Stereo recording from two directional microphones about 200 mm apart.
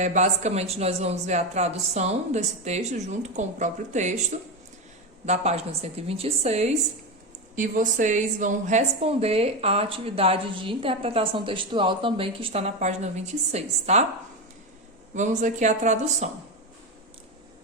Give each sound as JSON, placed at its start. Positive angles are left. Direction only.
{"t": 0.0, "sound": "speech", "side_deg": -35}
{"t": 5.2, "sound": "speech", "side_deg": -35}
{"t": 15.1, "sound": "speech", "side_deg": -35}